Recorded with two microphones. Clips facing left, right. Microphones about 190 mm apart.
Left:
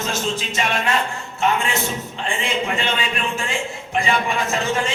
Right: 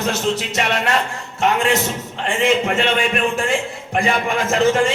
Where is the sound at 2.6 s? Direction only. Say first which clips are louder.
Right 5 dB; 60° right (ahead or behind).